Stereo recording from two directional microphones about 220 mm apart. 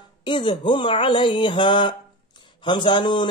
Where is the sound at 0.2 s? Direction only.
20° left (ahead or behind).